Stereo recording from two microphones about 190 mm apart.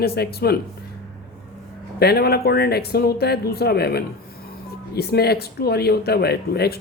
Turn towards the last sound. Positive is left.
turn(degrees=55)  # may be behind; listen again after turning